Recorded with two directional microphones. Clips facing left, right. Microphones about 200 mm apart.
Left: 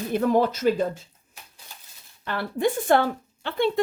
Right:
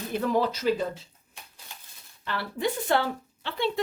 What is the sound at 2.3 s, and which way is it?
Speech, 50° left (ahead or behind).